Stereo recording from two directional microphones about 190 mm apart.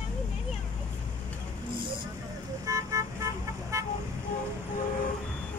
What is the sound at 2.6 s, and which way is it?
Vehicle, 15° right (ahead or behind).